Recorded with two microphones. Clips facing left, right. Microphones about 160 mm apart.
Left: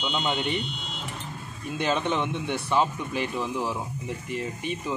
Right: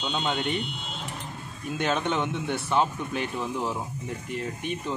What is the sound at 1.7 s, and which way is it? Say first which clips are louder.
Speech: left 1 dB; centre (ahead or behind).